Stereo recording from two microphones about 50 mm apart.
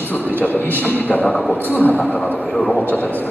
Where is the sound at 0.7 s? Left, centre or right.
Left.